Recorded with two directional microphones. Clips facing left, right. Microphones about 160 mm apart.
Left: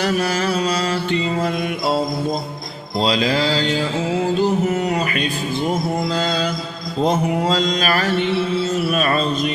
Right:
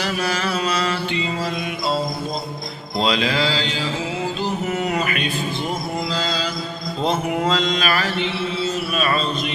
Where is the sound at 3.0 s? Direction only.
35° left (ahead or behind).